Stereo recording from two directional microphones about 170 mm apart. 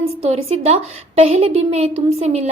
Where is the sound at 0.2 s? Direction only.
35° right (ahead or behind).